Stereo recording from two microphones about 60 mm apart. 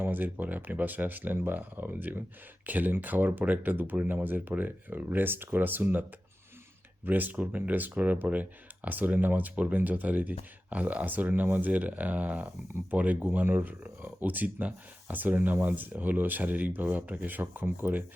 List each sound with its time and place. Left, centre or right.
0.0 s speech: right